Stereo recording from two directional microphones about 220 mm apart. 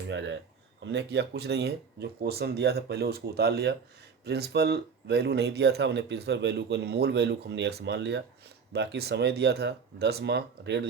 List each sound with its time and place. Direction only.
0.1 s speech: 55° right (ahead or behind)